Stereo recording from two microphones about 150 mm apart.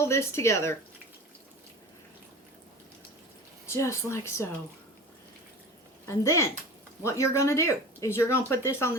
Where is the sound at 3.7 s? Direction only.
20° left (ahead or behind).